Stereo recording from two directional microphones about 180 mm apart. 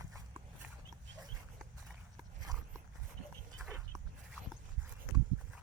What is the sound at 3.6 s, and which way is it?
Dog, 15° right (ahead or behind).